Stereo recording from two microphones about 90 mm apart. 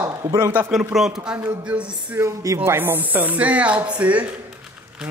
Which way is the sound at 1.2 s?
15° right (ahead or behind).